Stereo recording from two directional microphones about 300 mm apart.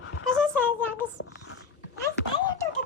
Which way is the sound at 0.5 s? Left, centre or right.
Centre.